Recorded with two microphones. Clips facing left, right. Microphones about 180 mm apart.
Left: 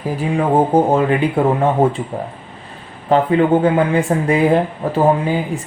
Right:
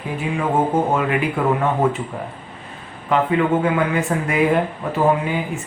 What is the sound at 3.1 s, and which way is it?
Speech, 30° left (ahead or behind).